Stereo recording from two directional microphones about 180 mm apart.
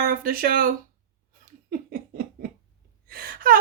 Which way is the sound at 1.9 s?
55° right (ahead or behind).